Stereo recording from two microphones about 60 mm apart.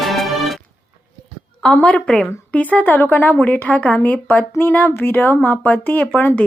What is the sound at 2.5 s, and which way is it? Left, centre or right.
Speech, left.